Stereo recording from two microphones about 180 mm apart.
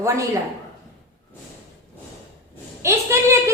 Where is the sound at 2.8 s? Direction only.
15° right (ahead or behind).